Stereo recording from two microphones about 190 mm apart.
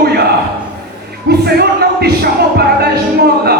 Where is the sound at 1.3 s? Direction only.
55° right (ahead or behind).